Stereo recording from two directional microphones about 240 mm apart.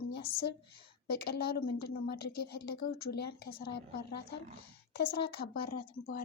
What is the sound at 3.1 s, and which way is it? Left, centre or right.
Speech, left.